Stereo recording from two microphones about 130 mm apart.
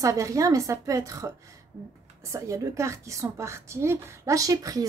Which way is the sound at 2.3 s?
25° right (ahead or behind).